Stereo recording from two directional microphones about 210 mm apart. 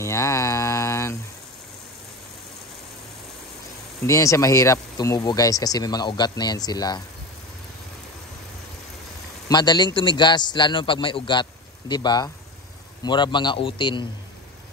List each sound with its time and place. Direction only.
0.0 s mantra: 15° left (ahead or behind)
4.0 s speech: 15° left (ahead or behind)
9.5 s a man's voice: 20° left (ahead or behind)